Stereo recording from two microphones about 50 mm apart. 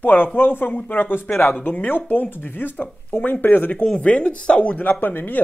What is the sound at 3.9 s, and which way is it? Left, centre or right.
Speech, left.